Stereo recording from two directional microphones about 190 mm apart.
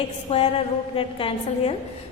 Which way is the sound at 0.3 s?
30° left (ahead or behind).